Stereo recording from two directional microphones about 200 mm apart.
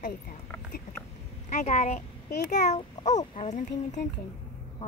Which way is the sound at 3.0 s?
35° left (ahead or behind).